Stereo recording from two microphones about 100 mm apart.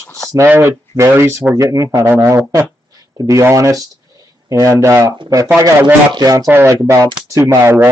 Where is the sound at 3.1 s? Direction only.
35° right (ahead or behind).